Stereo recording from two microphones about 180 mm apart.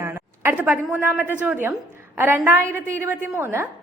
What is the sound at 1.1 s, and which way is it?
A woman's voice, 10° right (ahead or behind).